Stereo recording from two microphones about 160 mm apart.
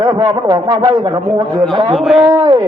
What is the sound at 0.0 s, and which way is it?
A man's voice, 30° right (ahead or behind).